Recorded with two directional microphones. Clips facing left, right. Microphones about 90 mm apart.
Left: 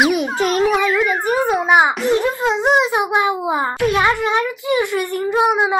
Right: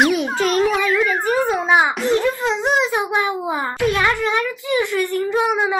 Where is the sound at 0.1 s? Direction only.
15° left (ahead or behind).